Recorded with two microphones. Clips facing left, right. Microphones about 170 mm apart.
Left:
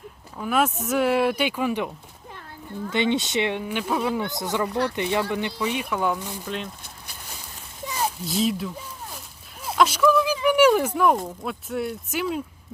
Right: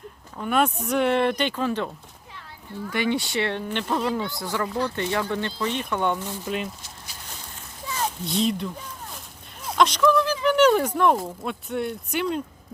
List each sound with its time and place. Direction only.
0.3 s speech: centre (ahead or behind)
2.9 s speech: 20° left (ahead or behind)
3.6 s speech: 5° left (ahead or behind)
4.3 s speech: 20° left (ahead or behind)
7.9 s zipper: 10° left (ahead or behind)
9.6 s speech: 5° left (ahead or behind)